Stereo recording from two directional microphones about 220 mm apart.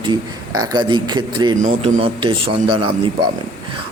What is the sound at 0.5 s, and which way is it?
A man's voice, 20° right (ahead or behind).